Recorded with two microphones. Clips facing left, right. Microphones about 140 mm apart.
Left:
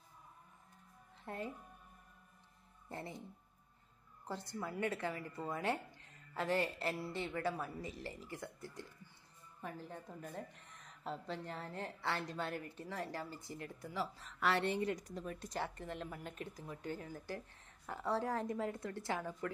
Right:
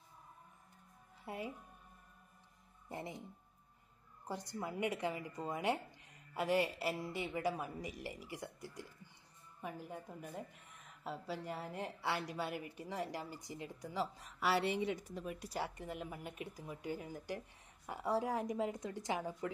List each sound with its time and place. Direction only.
1.2 s speech: 10° right (ahead or behind)
2.9 s a woman's voice: 15° right (ahead or behind)
4.3 s a woman's voice: 15° right (ahead or behind)